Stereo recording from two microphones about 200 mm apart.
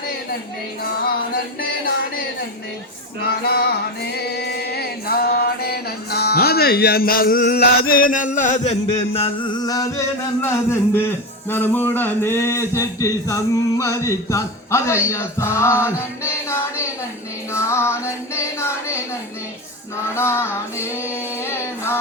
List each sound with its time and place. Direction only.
3.4 s music: 55° left (ahead or behind); by 16.9 s 15° left (ahead or behind)
17.5 s child singing: 15° left (ahead or behind)
20.1 s child singing: 10° left (ahead or behind)